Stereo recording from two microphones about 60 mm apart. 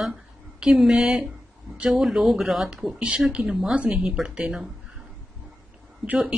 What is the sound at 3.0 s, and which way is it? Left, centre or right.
Speech, centre.